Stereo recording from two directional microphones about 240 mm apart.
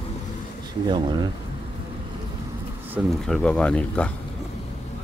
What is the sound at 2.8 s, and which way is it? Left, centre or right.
Speech, centre.